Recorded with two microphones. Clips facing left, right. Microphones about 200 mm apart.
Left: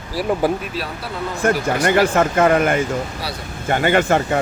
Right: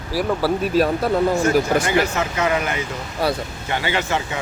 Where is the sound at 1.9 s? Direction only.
50° left (ahead or behind).